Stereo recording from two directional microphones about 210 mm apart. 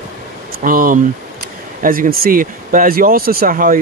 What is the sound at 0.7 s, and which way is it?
Speech, 40° right (ahead or behind).